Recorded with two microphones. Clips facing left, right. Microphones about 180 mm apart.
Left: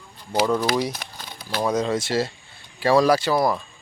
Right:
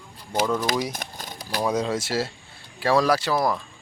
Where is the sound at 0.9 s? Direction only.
45° right (ahead or behind).